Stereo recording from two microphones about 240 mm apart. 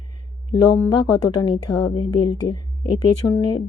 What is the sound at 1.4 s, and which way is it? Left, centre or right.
Speech, centre.